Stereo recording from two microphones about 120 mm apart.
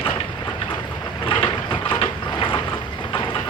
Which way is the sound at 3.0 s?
40° left (ahead or behind).